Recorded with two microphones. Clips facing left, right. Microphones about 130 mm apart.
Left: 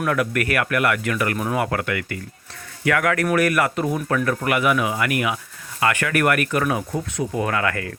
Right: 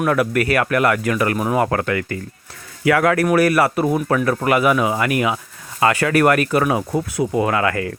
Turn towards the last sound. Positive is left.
turn(degrees=-25)  # may be behind; listen again after turning